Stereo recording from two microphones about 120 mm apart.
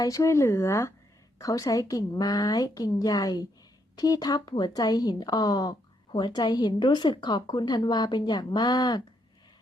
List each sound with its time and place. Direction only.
0.0 s speech: 25° left (ahead or behind)